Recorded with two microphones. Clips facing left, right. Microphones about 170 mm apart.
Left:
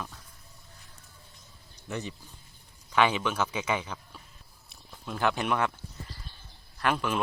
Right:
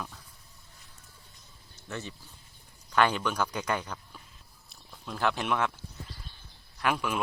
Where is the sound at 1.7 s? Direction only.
15° left (ahead or behind).